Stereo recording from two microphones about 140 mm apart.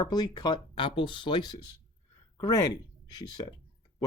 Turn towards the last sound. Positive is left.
turn(degrees=30)  # may be behind; listen again after turning